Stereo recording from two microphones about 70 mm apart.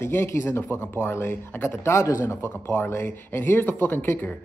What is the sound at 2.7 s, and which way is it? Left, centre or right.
Speech, left.